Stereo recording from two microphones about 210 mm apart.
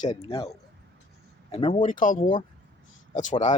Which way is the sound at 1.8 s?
40° left (ahead or behind).